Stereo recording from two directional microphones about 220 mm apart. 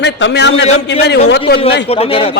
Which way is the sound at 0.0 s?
55° left (ahead or behind).